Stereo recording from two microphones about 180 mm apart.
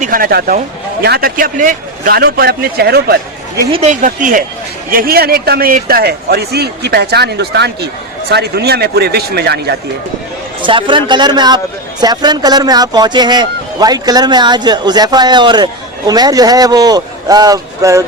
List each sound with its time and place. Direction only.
0.0 s a man's voice: 55° right (ahead or behind)
3.7 s a man's voice: 35° right (ahead or behind); by 9.7 s 65° right (ahead or behind)
10.6 s a man's voice: 25° right (ahead or behind)